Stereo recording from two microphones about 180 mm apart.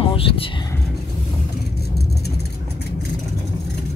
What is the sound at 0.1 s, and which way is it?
Speech, 30° left (ahead or behind).